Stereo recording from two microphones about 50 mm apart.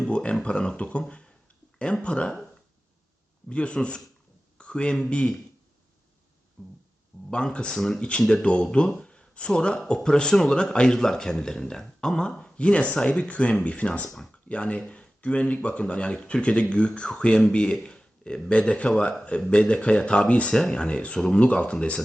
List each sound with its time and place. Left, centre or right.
0.0 s speech: left
3.5 s speech: left
6.6 s music: centre
7.3 s speech: centre
20.6 s speech: centre
20.8 s speech: left